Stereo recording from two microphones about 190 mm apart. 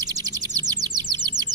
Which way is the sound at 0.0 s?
20° right (ahead or behind).